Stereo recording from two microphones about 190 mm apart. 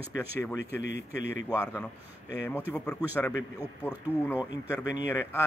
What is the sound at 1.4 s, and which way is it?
Speech, 10° left (ahead or behind).